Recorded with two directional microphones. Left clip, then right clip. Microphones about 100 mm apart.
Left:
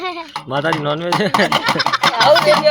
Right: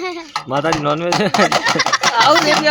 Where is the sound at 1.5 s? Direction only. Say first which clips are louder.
Right 1 dB; 40° right (ahead or behind).